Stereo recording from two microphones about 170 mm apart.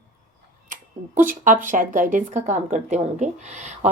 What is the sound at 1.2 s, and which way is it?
Speech, 50° right (ahead or behind).